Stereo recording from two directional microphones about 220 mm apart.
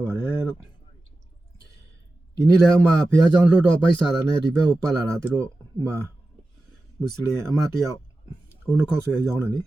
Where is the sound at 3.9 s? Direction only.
20° left (ahead or behind).